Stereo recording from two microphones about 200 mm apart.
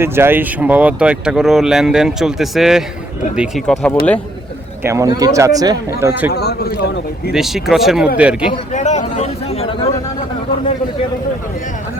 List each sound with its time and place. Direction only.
0.0 s speech: 10° right (ahead or behind)
4.8 s speech: 15° right (ahead or behind)
6.3 s a man's voice: 55° left (ahead or behind)
7.3 s speech: centre (ahead or behind)
8.7 s a sound: 35° left (ahead or behind)